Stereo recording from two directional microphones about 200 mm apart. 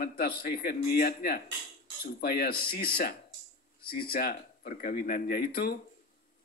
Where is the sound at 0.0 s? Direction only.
50° left (ahead or behind).